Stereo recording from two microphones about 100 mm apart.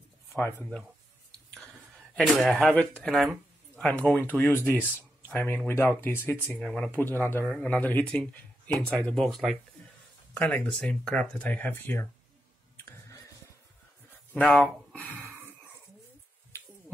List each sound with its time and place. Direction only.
0.3 s speech: 20° left (ahead or behind)
2.1 s speech: centre (ahead or behind)
2.7 s speech: 15° left (ahead or behind)
6.5 s speech: 5° left (ahead or behind)
7.0 s speech: 20° left (ahead or behind)
14.3 s speech: 15° left (ahead or behind)
15.0 s a sound: 15° left (ahead or behind)